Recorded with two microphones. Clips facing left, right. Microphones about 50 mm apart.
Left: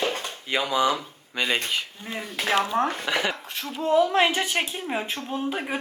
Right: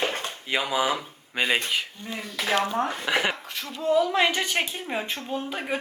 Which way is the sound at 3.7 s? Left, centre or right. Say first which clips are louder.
Left 1 dB; left.